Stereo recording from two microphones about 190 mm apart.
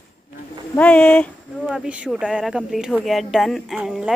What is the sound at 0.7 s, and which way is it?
Speech, 5° left (ahead or behind).